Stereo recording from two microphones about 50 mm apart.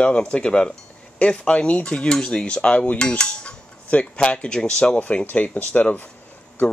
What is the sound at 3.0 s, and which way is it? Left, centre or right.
Cutlery, centre.